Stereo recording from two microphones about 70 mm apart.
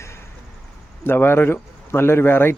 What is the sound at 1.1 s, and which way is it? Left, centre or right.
Speech, left.